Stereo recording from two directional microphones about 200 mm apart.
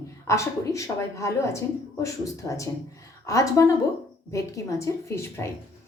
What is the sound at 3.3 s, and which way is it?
A woman's voice, 15° left (ahead or behind).